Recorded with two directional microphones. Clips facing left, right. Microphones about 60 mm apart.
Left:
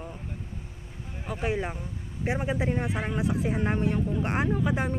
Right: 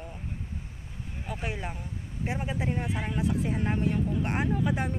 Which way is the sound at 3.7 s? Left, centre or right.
Centre.